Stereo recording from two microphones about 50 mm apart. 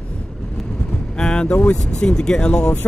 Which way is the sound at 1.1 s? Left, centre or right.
Centre.